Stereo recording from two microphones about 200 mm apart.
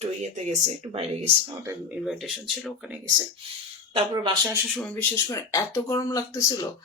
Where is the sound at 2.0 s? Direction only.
Centre (ahead or behind).